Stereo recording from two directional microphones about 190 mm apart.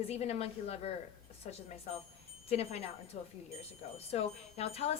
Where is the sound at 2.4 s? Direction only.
30° left (ahead or behind).